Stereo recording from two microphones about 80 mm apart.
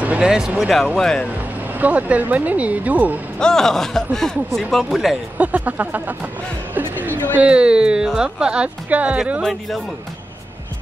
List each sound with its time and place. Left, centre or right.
0.0 s a sound: centre
0.6 s speech: centre
1.7 s speech: centre
3.3 s speech: centre
5.4 s speech: centre
6.7 s a sound: right
7.3 s speech: centre
9.4 s speech: centre